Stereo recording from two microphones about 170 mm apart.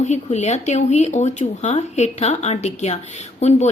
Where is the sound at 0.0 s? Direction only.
40° left (ahead or behind).